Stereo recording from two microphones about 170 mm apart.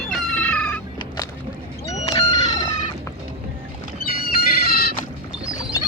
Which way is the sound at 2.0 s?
35° left (ahead or behind).